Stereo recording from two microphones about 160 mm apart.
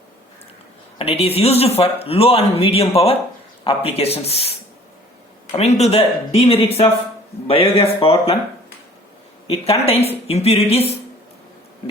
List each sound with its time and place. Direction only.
0.9 s speech: 40° left (ahead or behind)
9.5 s speech: 40° left (ahead or behind)